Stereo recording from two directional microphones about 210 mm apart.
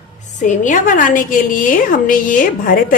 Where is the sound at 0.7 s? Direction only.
40° left (ahead or behind).